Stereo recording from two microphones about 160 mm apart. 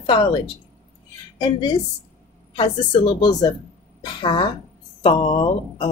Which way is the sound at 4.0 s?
25° left (ahead or behind).